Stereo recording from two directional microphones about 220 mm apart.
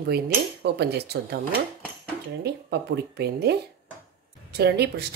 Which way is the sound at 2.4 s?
50° right (ahead or behind).